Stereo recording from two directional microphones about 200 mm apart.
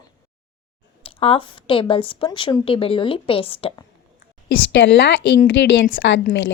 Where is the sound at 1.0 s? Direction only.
25° left (ahead or behind).